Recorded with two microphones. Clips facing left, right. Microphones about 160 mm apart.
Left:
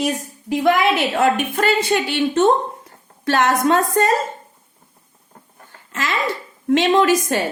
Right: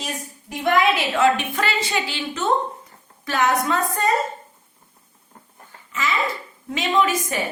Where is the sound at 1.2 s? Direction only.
45° left (ahead or behind); by 2.5 s 60° left (ahead or behind).